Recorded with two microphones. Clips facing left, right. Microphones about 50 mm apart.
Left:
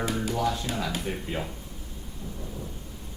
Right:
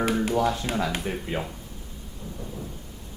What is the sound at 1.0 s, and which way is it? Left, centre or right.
Speech, centre.